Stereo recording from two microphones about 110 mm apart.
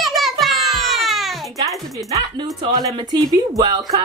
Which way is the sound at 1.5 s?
30° right (ahead or behind).